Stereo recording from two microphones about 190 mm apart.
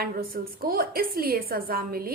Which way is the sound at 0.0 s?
55° right (ahead or behind).